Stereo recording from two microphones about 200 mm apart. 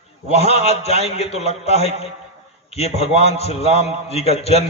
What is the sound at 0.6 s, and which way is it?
A man's voice, 30° left (ahead or behind).